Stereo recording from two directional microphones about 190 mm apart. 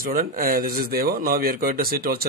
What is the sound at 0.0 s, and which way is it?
Speech, 50° right (ahead or behind).